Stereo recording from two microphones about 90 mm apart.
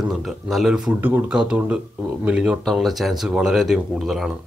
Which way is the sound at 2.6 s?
Centre (ahead or behind).